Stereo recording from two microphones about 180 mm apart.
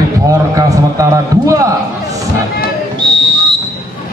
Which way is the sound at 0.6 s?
20° right (ahead or behind).